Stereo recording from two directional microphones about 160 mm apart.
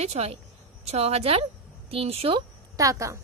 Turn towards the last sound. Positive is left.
turn(degrees=-20)  # may be behind; listen again after turning